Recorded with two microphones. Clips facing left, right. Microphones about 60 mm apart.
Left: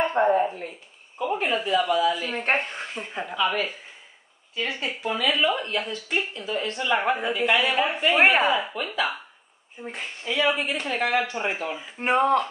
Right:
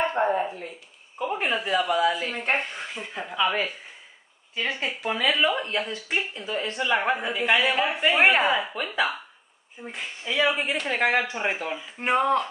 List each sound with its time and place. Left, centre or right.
0.2 s speech: centre
1.1 s speech: centre
1.7 s a woman's voice: right
2.3 s speech: left
2.9 s speech: centre
3.3 s a woman's voice: right
5.4 s speech: centre
7.5 s a woman's voice: centre
8.5 s speech: centre
10.2 s speech: centre
11.8 s speech: centre